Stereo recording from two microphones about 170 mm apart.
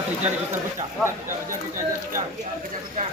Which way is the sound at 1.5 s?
50° right (ahead or behind).